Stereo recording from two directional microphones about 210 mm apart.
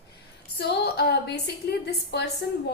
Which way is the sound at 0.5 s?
50° left (ahead or behind).